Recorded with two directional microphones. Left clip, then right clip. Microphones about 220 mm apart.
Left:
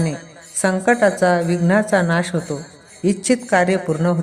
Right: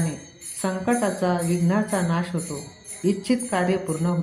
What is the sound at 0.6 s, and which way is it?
A woman's voice, 40° left (ahead or behind).